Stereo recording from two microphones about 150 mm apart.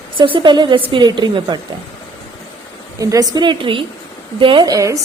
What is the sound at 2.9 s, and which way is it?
A woman's voice, 25° right (ahead or behind).